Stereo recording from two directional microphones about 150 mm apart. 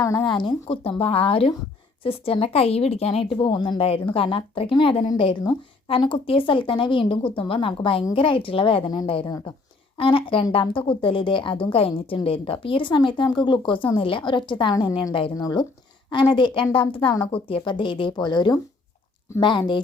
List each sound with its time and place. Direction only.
0.3 s a woman's voice: 30° left (ahead or behind)
3.4 s a woman's voice: 30° left (ahead or behind)